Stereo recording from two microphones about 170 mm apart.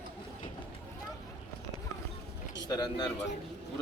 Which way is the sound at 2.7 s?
25° left (ahead or behind).